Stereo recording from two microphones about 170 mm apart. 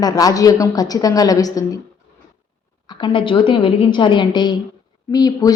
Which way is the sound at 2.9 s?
30° left (ahead or behind).